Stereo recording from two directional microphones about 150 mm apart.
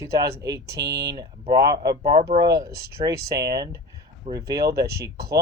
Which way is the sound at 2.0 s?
75° right (ahead or behind).